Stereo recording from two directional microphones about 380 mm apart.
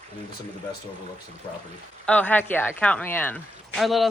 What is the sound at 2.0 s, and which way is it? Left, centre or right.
Speech, centre.